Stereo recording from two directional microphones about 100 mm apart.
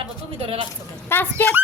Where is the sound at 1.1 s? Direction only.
20° left (ahead or behind).